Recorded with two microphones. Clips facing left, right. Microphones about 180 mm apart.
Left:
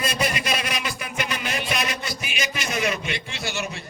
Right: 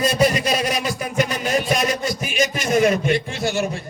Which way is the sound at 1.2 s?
40° right (ahead or behind).